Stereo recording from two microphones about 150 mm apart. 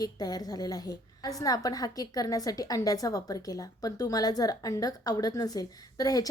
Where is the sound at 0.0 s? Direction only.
25° left (ahead or behind).